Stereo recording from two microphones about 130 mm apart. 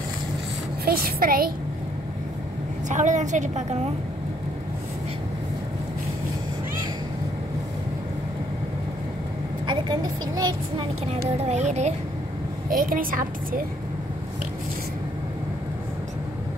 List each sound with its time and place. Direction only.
1.2 s a woman's voice: 90° right
2.9 s a woman's voice: 70° right (ahead or behind)
9.7 s a woman's voice: 35° right (ahead or behind)
11.1 s speech: 55° right (ahead or behind)
12.6 s a woman's voice: 90° right